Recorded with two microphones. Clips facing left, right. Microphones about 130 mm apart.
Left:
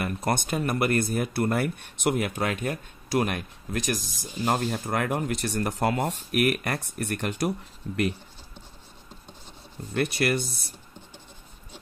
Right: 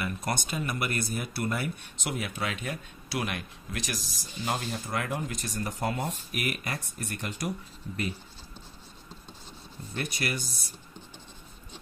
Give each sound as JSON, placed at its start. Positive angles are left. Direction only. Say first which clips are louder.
{"t": 0.3, "sound": "speech", "louder": "left 7 dB", "side_deg": 55}
{"t": 9.9, "sound": "speech", "louder": "left 8 dB", "side_deg": 60}